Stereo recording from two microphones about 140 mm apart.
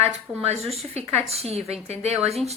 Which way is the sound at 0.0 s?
50° right (ahead or behind).